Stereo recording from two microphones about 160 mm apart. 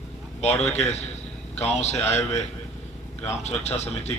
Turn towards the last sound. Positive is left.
turn(degrees=45)  # may be behind; listen again after turning